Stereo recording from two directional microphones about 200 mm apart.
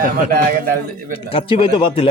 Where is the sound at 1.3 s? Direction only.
30° left (ahead or behind).